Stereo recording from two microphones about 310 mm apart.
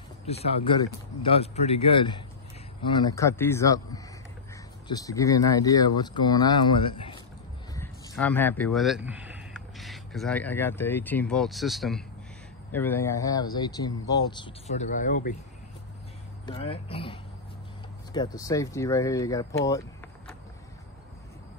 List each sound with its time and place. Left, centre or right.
0.3 s speech: centre
16.4 s speech: centre